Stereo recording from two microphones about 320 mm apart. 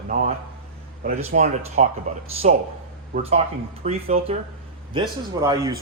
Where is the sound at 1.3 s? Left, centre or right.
Right.